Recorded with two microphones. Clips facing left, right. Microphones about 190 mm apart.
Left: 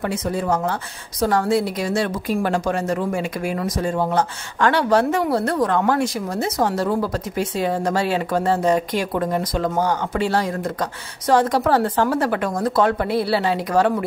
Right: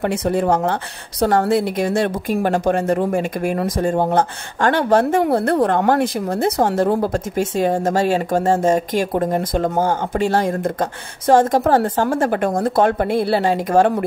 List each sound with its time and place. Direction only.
0.0 s a woman's voice: 60° right (ahead or behind)